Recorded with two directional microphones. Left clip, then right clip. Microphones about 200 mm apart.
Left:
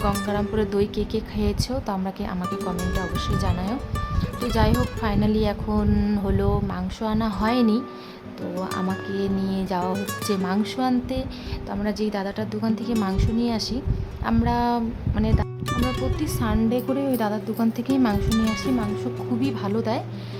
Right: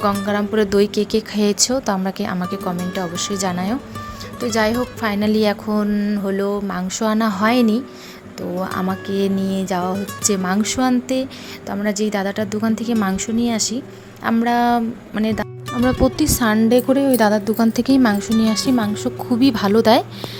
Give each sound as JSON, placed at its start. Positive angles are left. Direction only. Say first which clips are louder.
{"t": 0.3, "sound": "a woman's voice", "louder": "right 6 dB", "side_deg": -20}
{"t": 4.9, "sound": "a woman's voice", "louder": "right 5 dB", "side_deg": -15}
{"t": 5.9, "sound": "a woman's voice", "louder": "right 4 dB", "side_deg": 0}
{"t": 8.7, "sound": "speech", "louder": "right 3 dB", "side_deg": 0}
{"t": 9.0, "sound": "a woman's voice", "louder": "right 6 dB", "side_deg": -20}
{"t": 15.7, "sound": "speech", "louder": "right 8 dB", "side_deg": 0}
{"t": 16.0, "sound": "a woman's voice", "louder": "right 10 dB", "side_deg": -35}
{"t": 18.3, "sound": "speech", "louder": "right 5 dB", "side_deg": 0}
{"t": 18.5, "sound": "a woman's voice", "louder": "right 6 dB", "side_deg": -30}